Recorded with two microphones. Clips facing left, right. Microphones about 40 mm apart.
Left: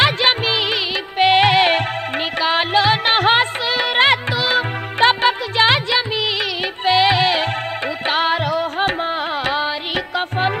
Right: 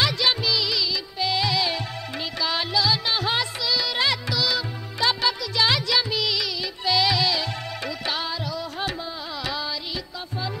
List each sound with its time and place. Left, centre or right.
0.0 s music: left